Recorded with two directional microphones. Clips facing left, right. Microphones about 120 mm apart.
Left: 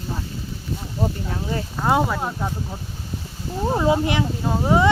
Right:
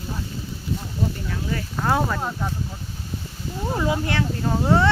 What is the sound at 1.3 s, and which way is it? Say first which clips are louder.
Speech: left 2 dB; 30° left (ahead or behind).